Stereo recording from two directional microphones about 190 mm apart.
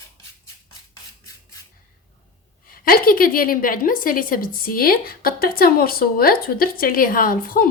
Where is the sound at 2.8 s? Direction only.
50° left (ahead or behind).